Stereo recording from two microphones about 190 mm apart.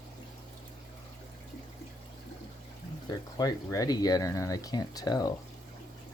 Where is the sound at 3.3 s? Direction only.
20° left (ahead or behind).